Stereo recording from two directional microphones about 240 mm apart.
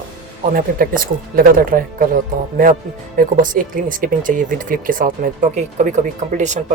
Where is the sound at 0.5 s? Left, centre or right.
Right.